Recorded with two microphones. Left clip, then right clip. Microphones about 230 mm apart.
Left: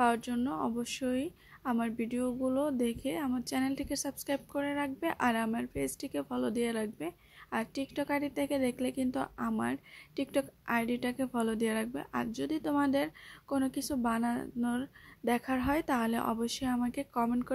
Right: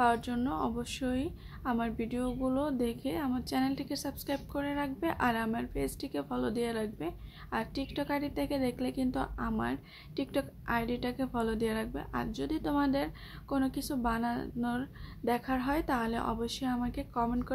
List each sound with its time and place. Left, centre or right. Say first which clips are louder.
0.0 s a woman's voice: right 1 dB; left